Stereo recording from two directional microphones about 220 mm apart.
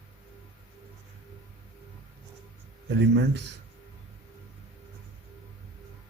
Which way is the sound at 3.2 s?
50° right (ahead or behind).